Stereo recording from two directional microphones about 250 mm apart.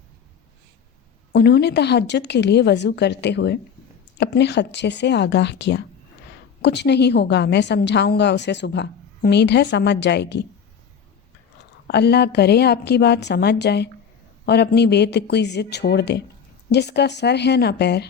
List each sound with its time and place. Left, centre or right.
1.3 s a woman's voice: left
11.9 s a woman's voice: left